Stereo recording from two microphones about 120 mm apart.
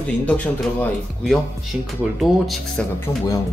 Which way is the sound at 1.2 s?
Centre (ahead or behind).